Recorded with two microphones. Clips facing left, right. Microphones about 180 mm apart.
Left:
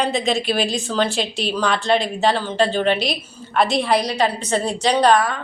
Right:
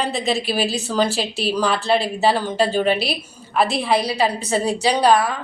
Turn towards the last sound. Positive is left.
turn(degrees=-10)  # may be behind; listen again after turning